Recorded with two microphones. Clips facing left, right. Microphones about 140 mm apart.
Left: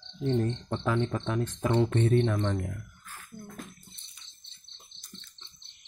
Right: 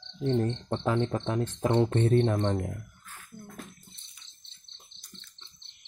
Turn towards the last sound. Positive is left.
turn(degrees=35)  # may be behind; listen again after turning